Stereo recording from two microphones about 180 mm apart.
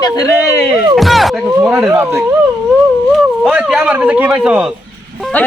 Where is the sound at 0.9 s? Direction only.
Centre (ahead or behind).